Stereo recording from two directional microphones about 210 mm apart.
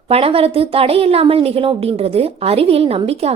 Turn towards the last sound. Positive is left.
turn(degrees=-30)  # may be behind; listen again after turning